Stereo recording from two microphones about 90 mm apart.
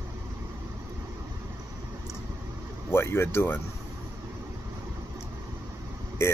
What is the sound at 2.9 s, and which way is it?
Speech, 25° left (ahead or behind).